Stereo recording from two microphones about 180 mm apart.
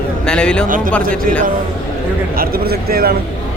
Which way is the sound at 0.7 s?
50° right (ahead or behind).